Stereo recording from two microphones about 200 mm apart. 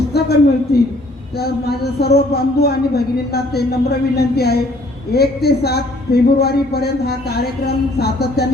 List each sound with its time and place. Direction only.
0.1 s a woman's voice: 55° left (ahead or behind)